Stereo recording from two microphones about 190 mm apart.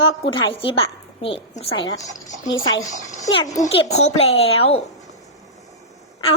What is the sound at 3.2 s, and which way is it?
Speech, 20° left (ahead or behind).